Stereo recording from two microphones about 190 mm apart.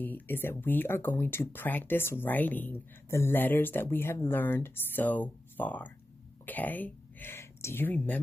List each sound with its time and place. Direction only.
0.0 s speech: 10° left (ahead or behind)